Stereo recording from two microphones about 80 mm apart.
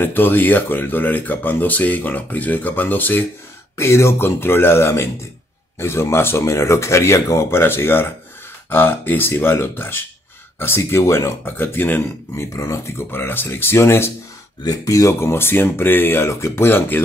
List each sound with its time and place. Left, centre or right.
0.0 s speech: left
3.7 s speech: left
12.5 s speech: left
14.6 s speech: left